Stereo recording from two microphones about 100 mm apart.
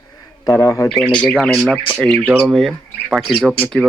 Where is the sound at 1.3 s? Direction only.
Centre (ahead or behind).